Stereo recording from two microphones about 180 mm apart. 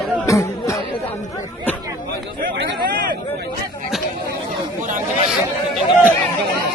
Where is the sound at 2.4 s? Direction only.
55° right (ahead or behind).